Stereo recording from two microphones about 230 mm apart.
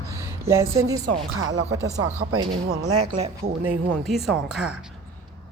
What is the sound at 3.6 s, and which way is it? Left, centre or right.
A woman's voice, centre.